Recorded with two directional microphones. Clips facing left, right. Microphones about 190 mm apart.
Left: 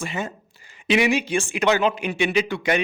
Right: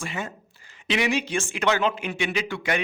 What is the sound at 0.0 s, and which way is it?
Speech, 20° left (ahead or behind).